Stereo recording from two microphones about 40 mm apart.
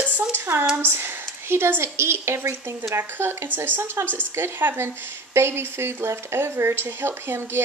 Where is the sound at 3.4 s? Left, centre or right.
Right.